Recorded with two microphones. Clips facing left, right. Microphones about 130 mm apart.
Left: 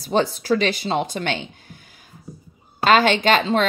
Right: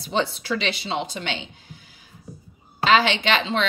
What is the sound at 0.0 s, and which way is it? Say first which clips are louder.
A woman's voice: left 4 dB; 45° left (ahead or behind).